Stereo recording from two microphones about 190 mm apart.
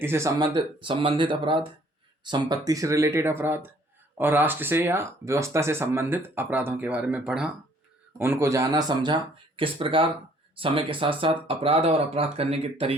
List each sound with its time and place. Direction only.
0.0 s speech: 15° right (ahead or behind); by 13.0 s 30° right (ahead or behind)